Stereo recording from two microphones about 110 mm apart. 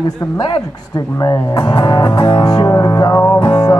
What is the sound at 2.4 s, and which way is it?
Music, 35° left (ahead or behind).